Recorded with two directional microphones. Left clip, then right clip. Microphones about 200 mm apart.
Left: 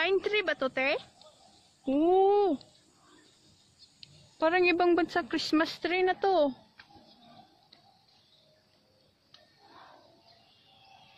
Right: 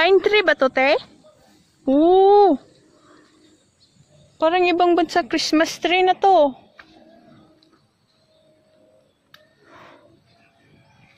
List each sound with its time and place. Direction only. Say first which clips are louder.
0.0 s speech: right 13 dB; 35° right (ahead or behind)
1.9 s speech: right 10 dB; 20° right (ahead or behind)
2.3 s speech: right 13 dB; 35° right (ahead or behind)
4.4 s a woman's voice: right 8 dB; 5° right (ahead or behind)